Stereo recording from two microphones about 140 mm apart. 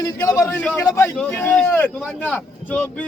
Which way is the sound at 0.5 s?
10° left (ahead or behind).